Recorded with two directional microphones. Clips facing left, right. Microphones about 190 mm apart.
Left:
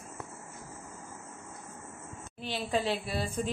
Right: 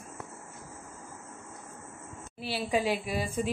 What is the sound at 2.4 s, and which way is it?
A woman's voice, 10° right (ahead or behind).